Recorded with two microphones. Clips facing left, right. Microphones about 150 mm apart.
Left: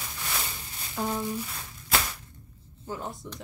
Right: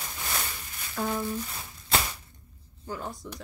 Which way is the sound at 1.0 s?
20° left (ahead or behind).